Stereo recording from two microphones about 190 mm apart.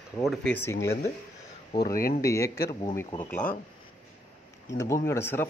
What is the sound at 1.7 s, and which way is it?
Speech, 20° left (ahead or behind).